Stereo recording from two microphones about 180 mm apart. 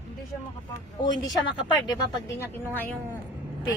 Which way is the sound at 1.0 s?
25° left (ahead or behind).